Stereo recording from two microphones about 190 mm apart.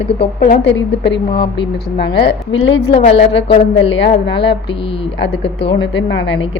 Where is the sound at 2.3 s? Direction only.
85° left.